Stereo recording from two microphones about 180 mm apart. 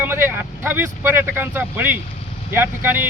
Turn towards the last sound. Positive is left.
turn(degrees=-10)  # may be behind; listen again after turning